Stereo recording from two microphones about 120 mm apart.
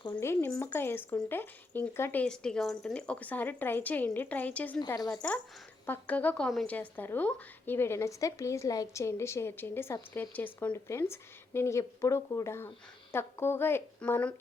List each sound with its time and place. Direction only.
0.1 s speech: 20° left (ahead or behind)
2.2 s a woman's voice: 5° left (ahead or behind)
6.7 s speech: 15° left (ahead or behind)